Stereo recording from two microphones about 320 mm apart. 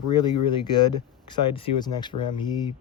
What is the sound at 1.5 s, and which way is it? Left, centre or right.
Speech, centre.